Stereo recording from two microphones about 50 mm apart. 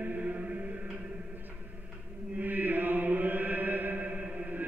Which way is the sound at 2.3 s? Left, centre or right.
Right.